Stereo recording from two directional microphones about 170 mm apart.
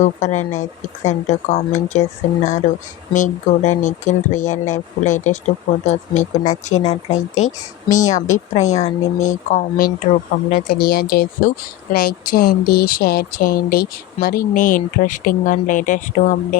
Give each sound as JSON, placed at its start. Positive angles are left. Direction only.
{"t": 0.0, "sound": "speech", "side_deg": 45}
{"t": 10.5, "sound": "speech", "side_deg": 60}